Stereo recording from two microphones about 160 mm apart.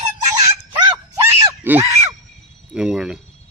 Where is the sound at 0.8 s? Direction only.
10° right (ahead or behind).